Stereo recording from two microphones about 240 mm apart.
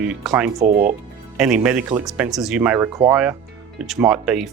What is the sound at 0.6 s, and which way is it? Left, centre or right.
Speech, right.